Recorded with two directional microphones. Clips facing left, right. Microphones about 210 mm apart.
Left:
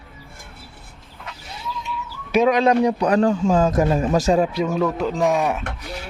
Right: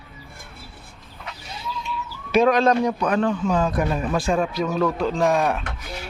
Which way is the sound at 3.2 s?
40° left (ahead or behind).